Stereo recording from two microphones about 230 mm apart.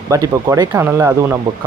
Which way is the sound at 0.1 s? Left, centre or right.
Centre.